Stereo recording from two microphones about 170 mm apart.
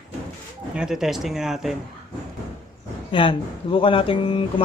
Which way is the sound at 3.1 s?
30° left (ahead or behind).